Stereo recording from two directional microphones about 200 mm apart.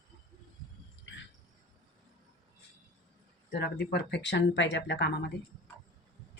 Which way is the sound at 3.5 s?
55° left (ahead or behind).